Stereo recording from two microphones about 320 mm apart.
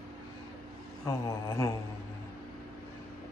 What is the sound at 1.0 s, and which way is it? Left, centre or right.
Mantra, centre.